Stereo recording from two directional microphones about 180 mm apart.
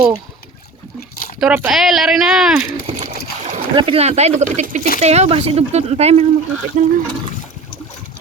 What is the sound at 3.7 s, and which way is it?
Speech, 30° right (ahead or behind).